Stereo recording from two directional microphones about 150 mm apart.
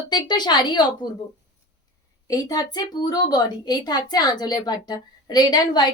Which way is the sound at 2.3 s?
25° left (ahead or behind).